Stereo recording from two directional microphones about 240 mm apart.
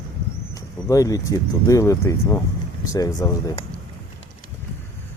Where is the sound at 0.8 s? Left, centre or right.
Centre.